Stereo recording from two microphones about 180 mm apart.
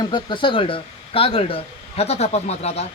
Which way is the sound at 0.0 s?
25° left (ahead or behind).